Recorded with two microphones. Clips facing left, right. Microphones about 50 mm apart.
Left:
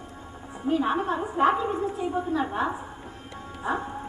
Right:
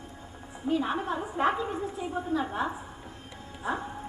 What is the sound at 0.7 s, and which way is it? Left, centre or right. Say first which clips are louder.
A woman's voice: left 4 dB; centre.